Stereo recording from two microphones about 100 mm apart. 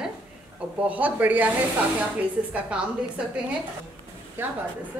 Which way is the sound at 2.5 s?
10° right (ahead or behind).